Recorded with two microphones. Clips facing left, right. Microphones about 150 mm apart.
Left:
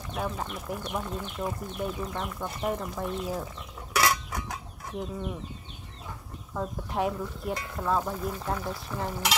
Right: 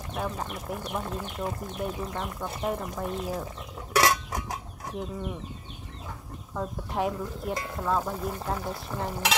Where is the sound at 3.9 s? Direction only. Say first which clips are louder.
Right 3 dB; 30° right (ahead or behind).